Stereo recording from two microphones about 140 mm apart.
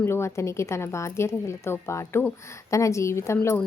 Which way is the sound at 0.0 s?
20° left (ahead or behind).